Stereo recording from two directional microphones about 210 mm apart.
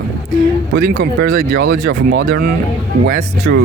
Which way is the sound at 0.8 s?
50° right (ahead or behind).